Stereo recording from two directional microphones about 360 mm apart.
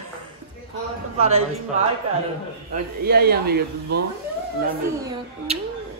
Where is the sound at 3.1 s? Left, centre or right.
Right.